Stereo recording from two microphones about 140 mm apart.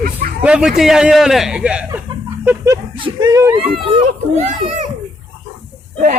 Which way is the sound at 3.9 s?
55° right (ahead or behind).